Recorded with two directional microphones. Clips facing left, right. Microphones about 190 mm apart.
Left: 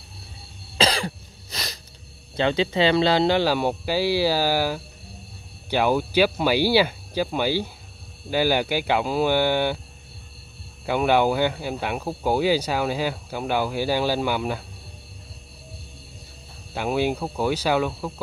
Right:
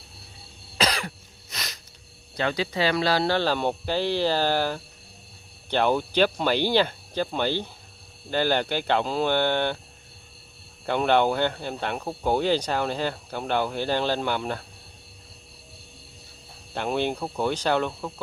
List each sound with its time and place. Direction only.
0.7 s cough: 30° left (ahead or behind)
2.3 s speech: 25° left (ahead or behind); by 9.8 s 10° left (ahead or behind)
10.9 s speech: 5° left (ahead or behind)
16.7 s speech: 5° left (ahead or behind)